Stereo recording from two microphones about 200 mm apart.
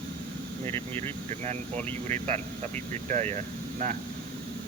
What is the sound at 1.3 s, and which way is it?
Speech, 35° right (ahead or behind).